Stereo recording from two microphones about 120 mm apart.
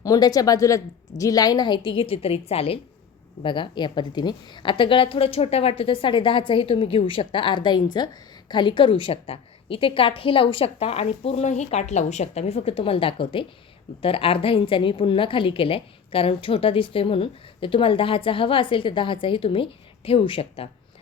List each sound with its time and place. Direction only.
0.0 s a woman's voice: 30° left (ahead or behind); by 2.7 s 55° left (ahead or behind)
3.4 s a woman's voice: 40° left (ahead or behind)